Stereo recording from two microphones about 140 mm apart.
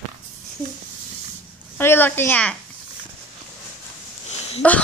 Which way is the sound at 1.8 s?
15° left (ahead or behind).